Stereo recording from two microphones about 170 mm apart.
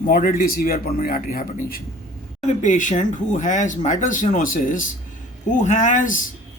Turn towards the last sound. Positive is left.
turn(degrees=50)  # may be behind; listen again after turning